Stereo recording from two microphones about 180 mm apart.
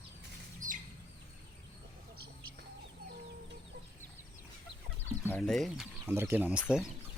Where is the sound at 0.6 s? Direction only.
45° right (ahead or behind).